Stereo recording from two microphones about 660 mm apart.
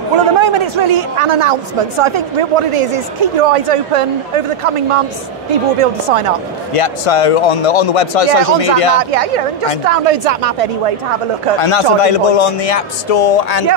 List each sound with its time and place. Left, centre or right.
0.2 s a man's voice: right
6.7 s a man's voice: left
9.1 s speech: right
11.5 s a man's voice: left